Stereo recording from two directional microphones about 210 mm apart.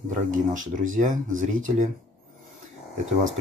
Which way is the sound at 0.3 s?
35° right (ahead or behind).